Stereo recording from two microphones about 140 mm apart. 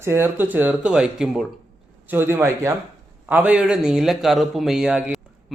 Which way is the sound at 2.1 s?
15° right (ahead or behind).